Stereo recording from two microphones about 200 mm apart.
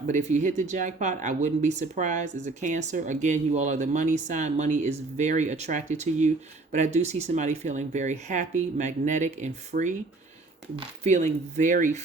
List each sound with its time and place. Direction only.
0.1 s speech: 35° right (ahead or behind)